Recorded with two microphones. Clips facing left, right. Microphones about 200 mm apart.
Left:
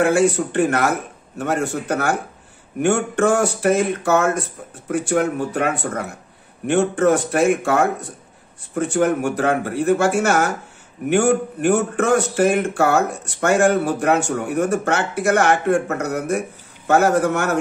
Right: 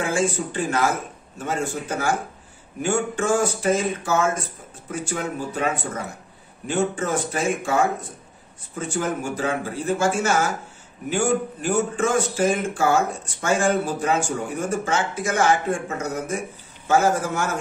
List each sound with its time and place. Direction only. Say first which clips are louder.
0.0 s speech: left 7 dB; 65° left (ahead or behind)